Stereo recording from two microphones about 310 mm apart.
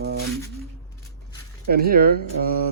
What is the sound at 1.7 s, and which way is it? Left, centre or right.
Speech, right.